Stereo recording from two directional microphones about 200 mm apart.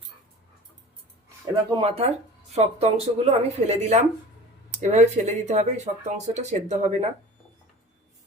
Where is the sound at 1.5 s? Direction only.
30° right (ahead or behind).